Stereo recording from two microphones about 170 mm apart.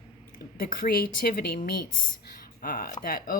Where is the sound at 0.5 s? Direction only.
60° left (ahead or behind).